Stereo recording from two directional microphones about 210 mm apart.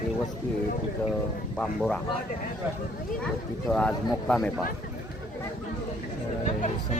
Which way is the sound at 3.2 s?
5° left (ahead or behind).